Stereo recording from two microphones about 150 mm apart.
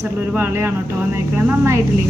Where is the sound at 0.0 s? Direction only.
15° right (ahead or behind).